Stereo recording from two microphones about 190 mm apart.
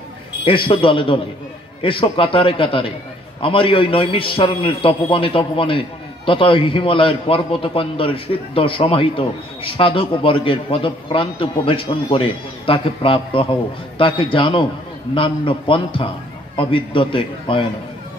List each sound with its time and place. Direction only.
0.5 s a man's voice: 25° left (ahead or behind)